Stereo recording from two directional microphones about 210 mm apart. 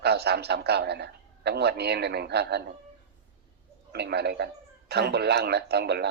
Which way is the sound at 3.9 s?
50° right (ahead or behind).